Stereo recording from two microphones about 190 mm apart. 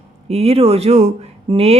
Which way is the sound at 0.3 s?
30° right (ahead or behind).